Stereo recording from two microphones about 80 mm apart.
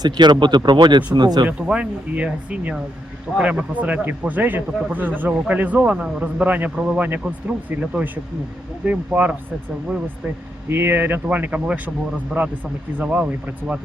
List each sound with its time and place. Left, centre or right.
0.0 s speech: right
1.5 s a man's voice: centre
8.8 s a man's voice: centre
10.7 s a man's voice: right